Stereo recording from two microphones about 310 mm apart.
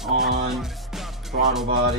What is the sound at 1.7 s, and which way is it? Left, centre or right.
Music, right.